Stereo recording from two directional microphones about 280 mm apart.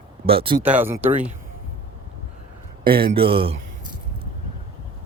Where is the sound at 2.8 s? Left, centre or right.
Right.